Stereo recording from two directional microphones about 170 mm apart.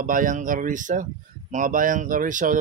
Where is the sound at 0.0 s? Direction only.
50° right (ahead or behind).